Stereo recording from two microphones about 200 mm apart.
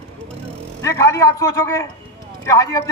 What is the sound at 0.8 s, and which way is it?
A man's voice, 15° left (ahead or behind).